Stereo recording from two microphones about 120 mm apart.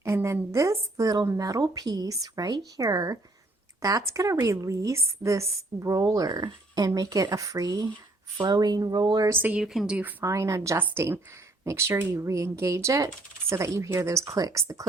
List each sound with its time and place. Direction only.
0.0 s a woman's voice: 20° right (ahead or behind)
9.3 s a woman's voice: 15° right (ahead or behind)
9.6 s a woman's voice: 5° right (ahead or behind); by 14.8 s 30° right (ahead or behind)